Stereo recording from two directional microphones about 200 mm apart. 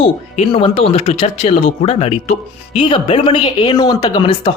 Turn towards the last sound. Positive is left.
turn(degrees=25)  # may be behind; listen again after turning